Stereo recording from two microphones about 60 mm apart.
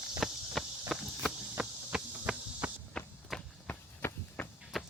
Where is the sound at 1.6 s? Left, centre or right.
Centre.